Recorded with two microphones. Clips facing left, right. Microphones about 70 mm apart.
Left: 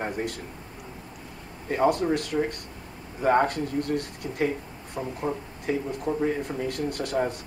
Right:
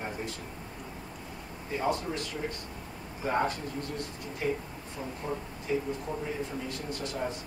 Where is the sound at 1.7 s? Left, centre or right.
Left.